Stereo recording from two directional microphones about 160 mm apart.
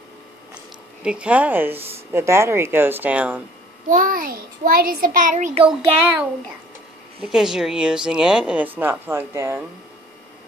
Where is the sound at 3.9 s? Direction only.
60° right (ahead or behind).